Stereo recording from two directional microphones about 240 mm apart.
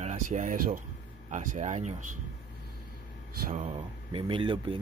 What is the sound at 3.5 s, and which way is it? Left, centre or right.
Speech, right.